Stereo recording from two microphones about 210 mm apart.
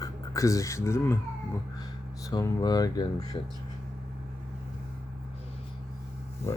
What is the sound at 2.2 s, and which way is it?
Speech, 15° left (ahead or behind).